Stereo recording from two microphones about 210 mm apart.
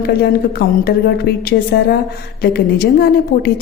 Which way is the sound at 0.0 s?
50° left (ahead or behind).